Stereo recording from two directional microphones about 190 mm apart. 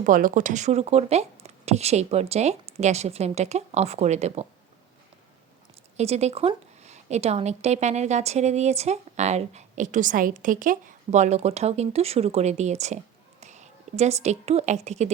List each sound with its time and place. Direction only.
0.0 s a woman's voice: 45° right (ahead or behind)
6.0 s a woman's voice: 35° right (ahead or behind)